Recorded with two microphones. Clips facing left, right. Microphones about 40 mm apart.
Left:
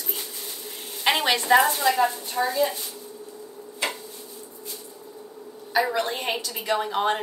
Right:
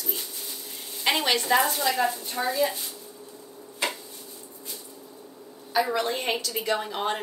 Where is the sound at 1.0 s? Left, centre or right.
Left; by 2.8 s centre.